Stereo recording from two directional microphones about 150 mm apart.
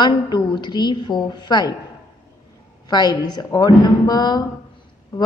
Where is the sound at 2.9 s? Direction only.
30° left (ahead or behind).